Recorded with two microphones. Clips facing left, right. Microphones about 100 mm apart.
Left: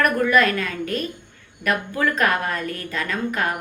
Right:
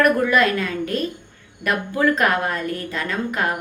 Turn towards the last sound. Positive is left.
turn(degrees=-20)  # may be behind; listen again after turning